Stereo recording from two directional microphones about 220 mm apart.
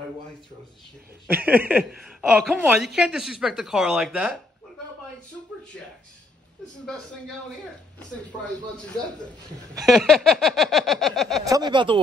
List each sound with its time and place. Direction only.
1.2 s a woman's voice: 5° right (ahead or behind)
9.8 s a woman's voice: centre (ahead or behind)
11.4 s speech: 15° right (ahead or behind)